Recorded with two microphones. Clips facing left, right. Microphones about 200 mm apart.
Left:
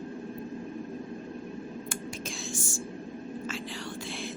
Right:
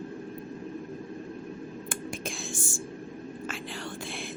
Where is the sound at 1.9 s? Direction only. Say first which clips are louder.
Right 1 dB; 55° right (ahead or behind).